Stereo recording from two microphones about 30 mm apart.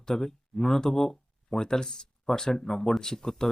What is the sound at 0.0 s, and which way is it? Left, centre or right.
Speech, centre.